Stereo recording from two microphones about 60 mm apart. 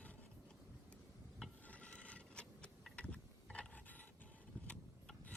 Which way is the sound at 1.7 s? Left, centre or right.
Left.